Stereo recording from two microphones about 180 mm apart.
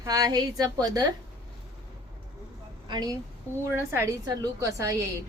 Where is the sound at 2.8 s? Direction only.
25° right (ahead or behind).